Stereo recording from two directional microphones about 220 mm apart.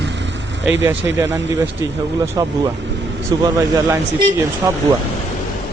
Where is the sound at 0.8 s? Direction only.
10° right (ahead or behind).